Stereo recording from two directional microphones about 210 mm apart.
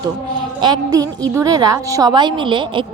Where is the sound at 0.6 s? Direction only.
20° right (ahead or behind).